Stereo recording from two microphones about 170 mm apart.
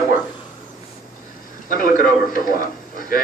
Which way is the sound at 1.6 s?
55° left (ahead or behind).